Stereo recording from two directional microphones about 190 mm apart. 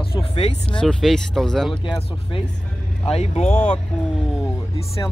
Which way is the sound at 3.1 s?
30° left (ahead or behind).